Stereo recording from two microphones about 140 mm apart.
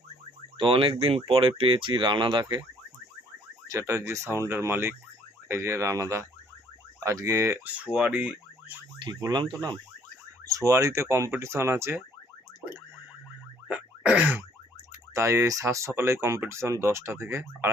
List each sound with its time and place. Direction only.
0.5 s speech: 35° right (ahead or behind)
3.7 s speech: 20° right (ahead or behind)
7.9 s speech: 10° right (ahead or behind)
9.2 s speech: 30° right (ahead or behind)
13.7 s a sound: 5° right (ahead or behind)
15.1 s speech: 20° right (ahead or behind)